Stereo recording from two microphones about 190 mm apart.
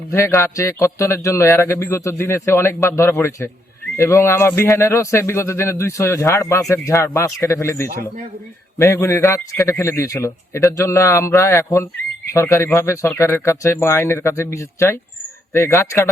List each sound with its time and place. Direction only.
0.1 s speech: 15° left (ahead or behind)